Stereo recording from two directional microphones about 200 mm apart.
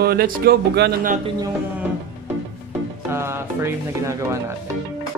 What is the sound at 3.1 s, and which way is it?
Speech, 10° right (ahead or behind).